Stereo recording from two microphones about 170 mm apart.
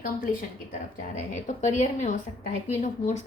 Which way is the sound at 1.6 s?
45° left (ahead or behind).